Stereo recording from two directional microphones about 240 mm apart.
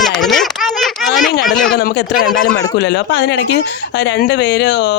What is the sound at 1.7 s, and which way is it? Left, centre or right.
Speech, left.